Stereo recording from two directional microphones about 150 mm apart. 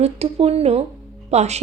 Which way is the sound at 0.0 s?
45° right (ahead or behind).